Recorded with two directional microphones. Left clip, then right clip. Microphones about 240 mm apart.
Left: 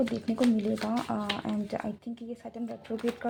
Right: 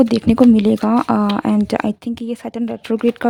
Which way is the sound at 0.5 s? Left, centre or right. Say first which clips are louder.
Right 15 dB; right.